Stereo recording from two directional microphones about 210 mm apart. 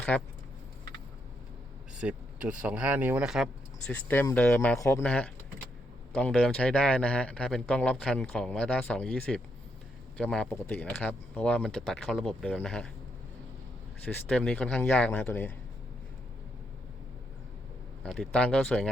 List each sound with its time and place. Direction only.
0.1 s a man's voice: 5° left (ahead or behind)
2.0 s speech: 5° right (ahead or behind)
14.0 s a man's voice: 5° left (ahead or behind)
18.0 s speech: 5° left (ahead or behind)